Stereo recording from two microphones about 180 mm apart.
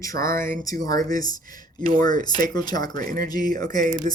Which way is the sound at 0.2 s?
50° right (ahead or behind).